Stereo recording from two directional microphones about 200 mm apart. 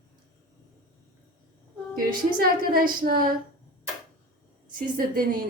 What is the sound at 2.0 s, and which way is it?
A woman's voice, 45° right (ahead or behind).